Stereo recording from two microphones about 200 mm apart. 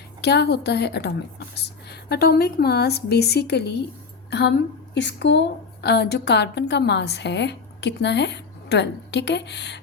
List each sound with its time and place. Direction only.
0.2 s a woman's voice: 55° left (ahead or behind)